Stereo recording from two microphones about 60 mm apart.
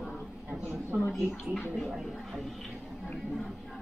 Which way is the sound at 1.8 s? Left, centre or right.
Centre.